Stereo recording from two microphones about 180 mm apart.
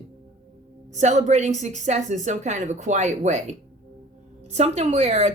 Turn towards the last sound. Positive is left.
turn(degrees=-35)  # may be behind; listen again after turning